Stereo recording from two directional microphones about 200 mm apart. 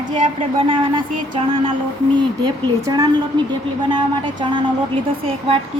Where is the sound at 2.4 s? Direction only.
20° right (ahead or behind).